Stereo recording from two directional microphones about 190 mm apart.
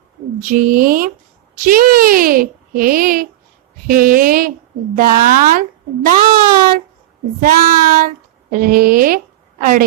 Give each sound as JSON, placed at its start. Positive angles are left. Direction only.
{"t": 0.4, "sound": "a child's voice", "side_deg": -45}
{"t": 6.3, "sound": "speech", "side_deg": -20}
{"t": 7.3, "sound": "child singing", "side_deg": -50}